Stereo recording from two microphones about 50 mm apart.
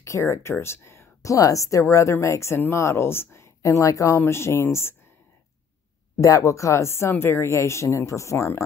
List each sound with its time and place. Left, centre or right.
0.0 s speech: left
4.3 s speech: left
6.2 s speech: left
7.1 s speech: left